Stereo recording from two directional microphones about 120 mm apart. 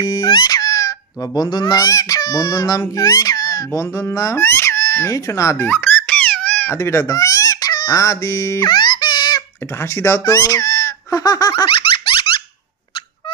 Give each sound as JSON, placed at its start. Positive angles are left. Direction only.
{"t": 0.0, "sound": "speech", "side_deg": 35}
{"t": 5.7, "sound": "baby laughter", "side_deg": 15}
{"t": 8.6, "sound": "a sound", "side_deg": 40}
{"t": 9.8, "sound": "speech", "side_deg": 20}